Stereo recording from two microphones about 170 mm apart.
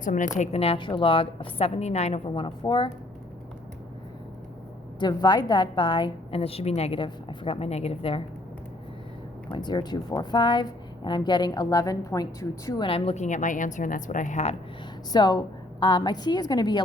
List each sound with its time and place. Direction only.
0.0 s a woman's voice: 50° left (ahead or behind)
0.3 s a woman's voice: 35° left (ahead or behind)
4.9 s a woman's voice: 25° left (ahead or behind)
9.5 s speech: 25° left (ahead or behind); by 14.5 s 45° left (ahead or behind)
15.1 s speech: 25° left (ahead or behind)